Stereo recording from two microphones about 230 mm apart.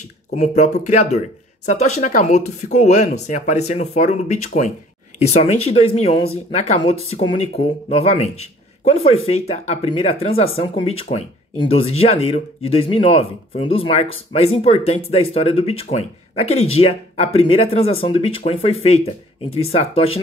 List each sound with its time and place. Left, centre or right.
0.3 s speech: left